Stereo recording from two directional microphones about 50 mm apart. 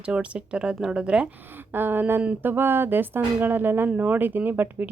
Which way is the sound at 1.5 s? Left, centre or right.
Right.